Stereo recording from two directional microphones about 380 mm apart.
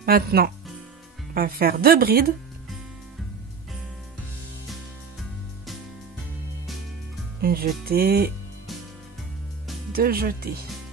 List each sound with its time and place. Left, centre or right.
0.0 s speech: right
7.4 s speech: right
9.9 s speech: right